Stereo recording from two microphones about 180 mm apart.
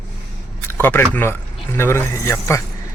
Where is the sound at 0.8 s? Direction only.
10° left (ahead or behind).